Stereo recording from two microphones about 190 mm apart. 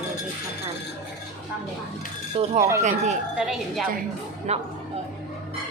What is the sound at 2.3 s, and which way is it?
Speech, 30° right (ahead or behind).